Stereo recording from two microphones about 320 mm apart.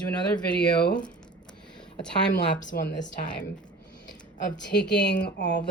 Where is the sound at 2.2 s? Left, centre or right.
Left.